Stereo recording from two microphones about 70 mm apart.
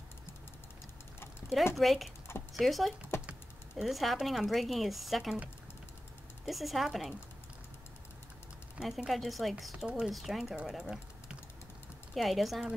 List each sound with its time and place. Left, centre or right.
1.8 s speech: centre
2.3 s a sound: left
2.6 s speech: centre
3.1 s typing: left
3.7 s speech: centre
6.4 s speech: centre
8.8 s speech: centre
10.4 s speech: centre
12.1 s speech: centre